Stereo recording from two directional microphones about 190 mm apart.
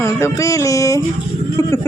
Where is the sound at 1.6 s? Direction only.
15° left (ahead or behind).